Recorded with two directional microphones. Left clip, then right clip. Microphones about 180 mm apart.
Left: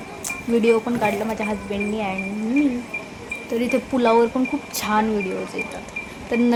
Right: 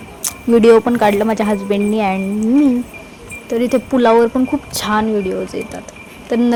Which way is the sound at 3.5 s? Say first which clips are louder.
Right 7 dB; 30° right (ahead or behind).